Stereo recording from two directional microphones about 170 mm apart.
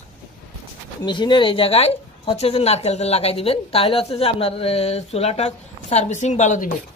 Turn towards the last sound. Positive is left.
turn(degrees=45)  # may be behind; listen again after turning